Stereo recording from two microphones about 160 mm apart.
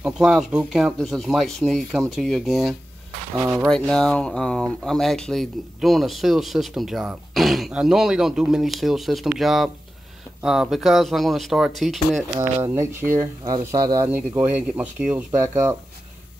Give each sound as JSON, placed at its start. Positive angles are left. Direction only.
{"t": 0.0, "sound": "speech", "side_deg": 0}
{"t": 3.4, "sound": "speech", "side_deg": -15}
{"t": 3.7, "sound": "speech", "side_deg": 5}
{"t": 12.6, "sound": "speech", "side_deg": -15}
{"t": 13.4, "sound": "speech", "side_deg": -25}
{"t": 15.3, "sound": "speech", "side_deg": -20}